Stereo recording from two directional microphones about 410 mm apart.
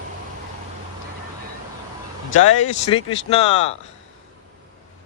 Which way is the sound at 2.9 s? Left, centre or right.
Centre.